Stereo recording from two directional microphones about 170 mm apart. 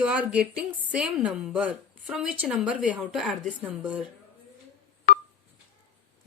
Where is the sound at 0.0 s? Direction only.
5° right (ahead or behind).